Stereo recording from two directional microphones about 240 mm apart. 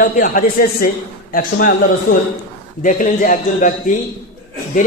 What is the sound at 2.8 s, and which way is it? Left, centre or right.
Speech, left.